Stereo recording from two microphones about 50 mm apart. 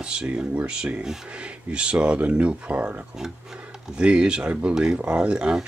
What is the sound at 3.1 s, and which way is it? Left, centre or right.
Speech, centre.